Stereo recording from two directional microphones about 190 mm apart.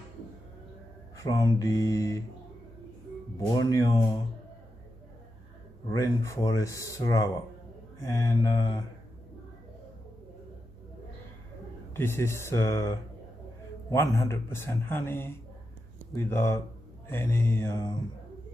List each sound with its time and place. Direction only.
1.1 s a man's voice: 20° left (ahead or behind)
3.3 s a man's voice: 15° left (ahead or behind)
5.9 s a man's voice: 15° left (ahead or behind)
11.9 s a man's voice: 15° left (ahead or behind)